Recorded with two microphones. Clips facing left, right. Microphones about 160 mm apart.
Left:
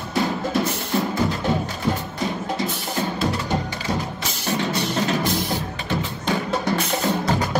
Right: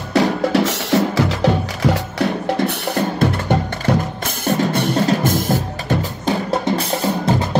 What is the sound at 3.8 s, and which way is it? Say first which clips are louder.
Music: right 7 dB; 50° right (ahead or behind).